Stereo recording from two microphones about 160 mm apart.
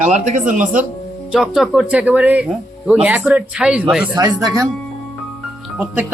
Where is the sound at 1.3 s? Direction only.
5° right (ahead or behind).